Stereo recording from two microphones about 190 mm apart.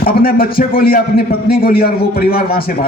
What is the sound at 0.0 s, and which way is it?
A man's voice, 50° left (ahead or behind).